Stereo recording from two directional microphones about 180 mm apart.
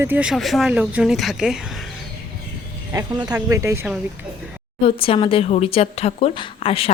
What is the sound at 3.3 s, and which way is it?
Speech, 15° right (ahead or behind).